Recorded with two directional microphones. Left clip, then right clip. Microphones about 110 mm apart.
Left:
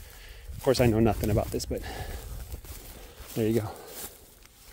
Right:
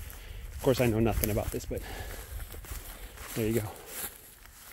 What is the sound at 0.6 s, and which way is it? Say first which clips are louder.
Speech: left 3 dB; 90° left.